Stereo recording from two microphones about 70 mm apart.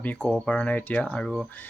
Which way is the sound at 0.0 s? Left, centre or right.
Left.